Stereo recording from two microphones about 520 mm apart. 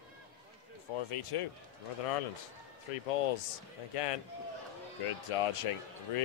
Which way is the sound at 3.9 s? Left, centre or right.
Left.